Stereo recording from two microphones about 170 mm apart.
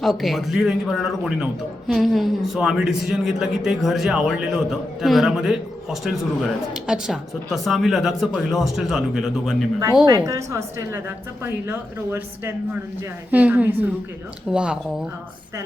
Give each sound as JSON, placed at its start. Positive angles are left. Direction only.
{"t": 0.0, "sound": "a man's voice", "side_deg": 0}
{"t": 10.1, "sound": "a man's voice", "side_deg": -20}